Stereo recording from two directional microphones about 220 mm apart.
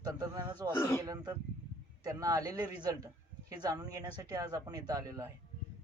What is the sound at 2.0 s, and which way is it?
A man's voice, 15° right (ahead or behind).